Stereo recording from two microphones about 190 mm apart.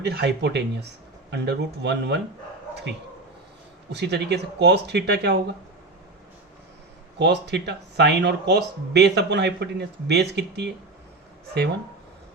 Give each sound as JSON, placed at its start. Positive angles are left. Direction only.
{"t": 0.0, "sound": "speech", "side_deg": -60}
{"t": 3.9, "sound": "speech", "side_deg": -60}
{"t": 7.2, "sound": "speech", "side_deg": -65}